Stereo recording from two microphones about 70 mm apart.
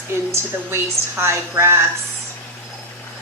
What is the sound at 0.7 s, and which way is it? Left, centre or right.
A woman's voice, right.